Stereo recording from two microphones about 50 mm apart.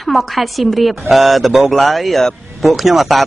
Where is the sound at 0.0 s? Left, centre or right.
Centre.